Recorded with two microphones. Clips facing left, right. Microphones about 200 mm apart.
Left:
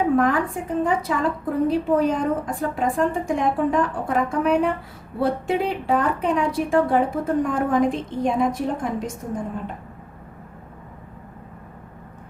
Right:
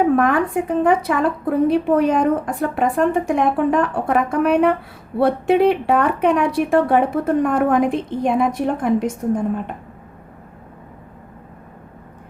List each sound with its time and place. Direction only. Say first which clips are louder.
0.2 s a woman's voice: right 3 dB; 65° right (ahead or behind)